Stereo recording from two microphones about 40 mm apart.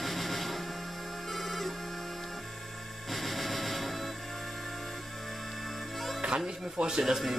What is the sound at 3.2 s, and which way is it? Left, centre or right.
Music, centre.